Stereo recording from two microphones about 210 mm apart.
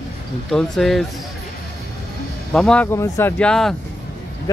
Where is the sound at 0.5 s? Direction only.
Centre (ahead or behind).